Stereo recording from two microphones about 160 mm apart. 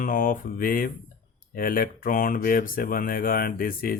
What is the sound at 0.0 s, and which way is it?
Speech, 60° left (ahead or behind).